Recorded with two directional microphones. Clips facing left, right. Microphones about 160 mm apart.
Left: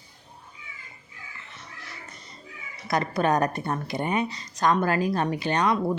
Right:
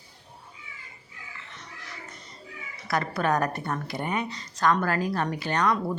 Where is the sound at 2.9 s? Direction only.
20° left (ahead or behind).